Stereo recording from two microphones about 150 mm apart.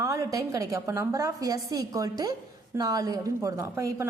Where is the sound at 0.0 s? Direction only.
20° right (ahead or behind).